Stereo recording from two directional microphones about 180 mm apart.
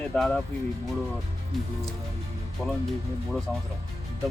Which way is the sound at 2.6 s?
5° left (ahead or behind).